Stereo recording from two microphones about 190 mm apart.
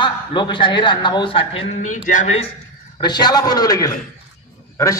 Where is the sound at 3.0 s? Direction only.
20° left (ahead or behind).